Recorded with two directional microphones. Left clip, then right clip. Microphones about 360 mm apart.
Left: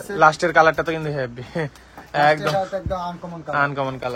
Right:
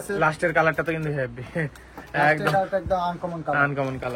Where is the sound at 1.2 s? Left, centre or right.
Left.